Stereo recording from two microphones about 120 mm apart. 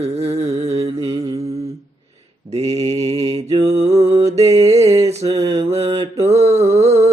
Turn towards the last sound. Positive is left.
turn(degrees=-60)  # may be behind; listen again after turning